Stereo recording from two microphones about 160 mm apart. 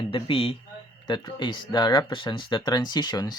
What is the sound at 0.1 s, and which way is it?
Speech, 35° left (ahead or behind).